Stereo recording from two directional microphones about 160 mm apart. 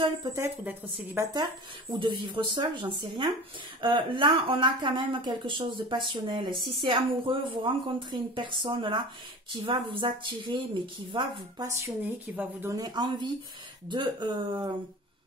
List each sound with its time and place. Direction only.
0.0 s speech: 25° right (ahead or behind)
0.4 s speech: 15° right (ahead or behind)
6.5 s a woman's voice: centre (ahead or behind)
7.0 s speech: 30° right (ahead or behind)
11.6 s a woman's voice: 15° right (ahead or behind)
12.7 s speech: 25° right (ahead or behind)